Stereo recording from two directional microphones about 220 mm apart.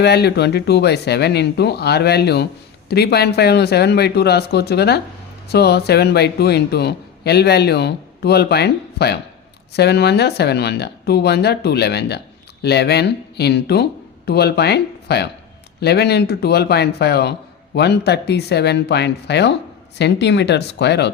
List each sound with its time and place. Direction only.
0.0 s speech: 50° left (ahead or behind)